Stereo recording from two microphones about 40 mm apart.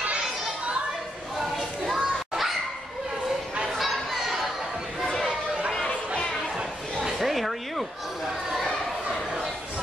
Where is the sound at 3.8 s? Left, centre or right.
Centre.